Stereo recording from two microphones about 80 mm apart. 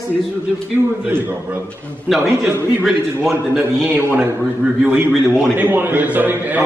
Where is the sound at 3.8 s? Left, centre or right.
Right.